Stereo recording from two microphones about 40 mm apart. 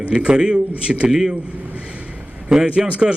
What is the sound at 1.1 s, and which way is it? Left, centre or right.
Speech, centre.